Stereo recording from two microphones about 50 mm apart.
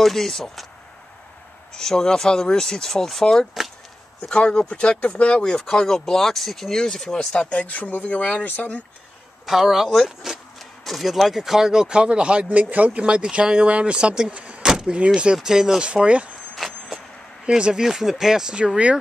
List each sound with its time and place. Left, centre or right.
0.0 s speech: centre
1.7 s speech: centre
4.3 s speech: centre
7.6 s speech: left
9.5 s speech: centre; by 14.7 s right
14.7 s vehicle: centre
15.3 s speech: centre
15.9 s speech: right
16.5 s vehicle: centre
17.5 s speech: centre